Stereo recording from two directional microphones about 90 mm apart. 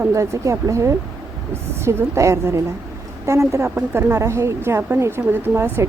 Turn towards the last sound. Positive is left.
turn(degrees=-25)  # may be behind; listen again after turning